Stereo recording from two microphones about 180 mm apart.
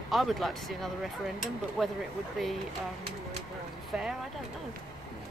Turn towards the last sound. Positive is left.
turn(degrees=-5)  # may be behind; listen again after turning